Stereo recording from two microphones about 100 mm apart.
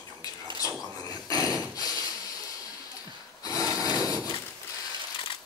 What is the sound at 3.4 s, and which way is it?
Wood, 40° left (ahead or behind).